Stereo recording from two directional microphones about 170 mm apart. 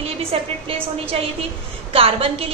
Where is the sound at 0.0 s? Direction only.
35° right (ahead or behind).